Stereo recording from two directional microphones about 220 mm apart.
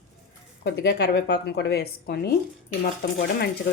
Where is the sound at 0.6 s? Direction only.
50° left (ahead or behind).